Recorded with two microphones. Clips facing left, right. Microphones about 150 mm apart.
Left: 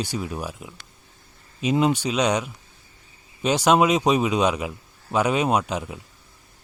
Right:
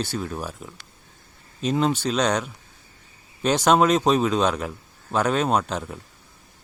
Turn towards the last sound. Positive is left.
turn(degrees=5)  # may be behind; listen again after turning